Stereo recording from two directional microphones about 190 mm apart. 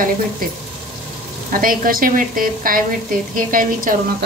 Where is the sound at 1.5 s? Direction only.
50° right (ahead or behind).